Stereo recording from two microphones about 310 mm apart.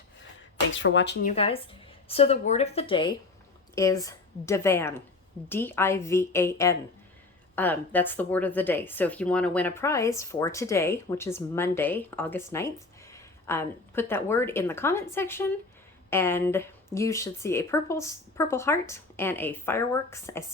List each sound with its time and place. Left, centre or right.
0.7 s speech: left
1.4 s a woman's voice: centre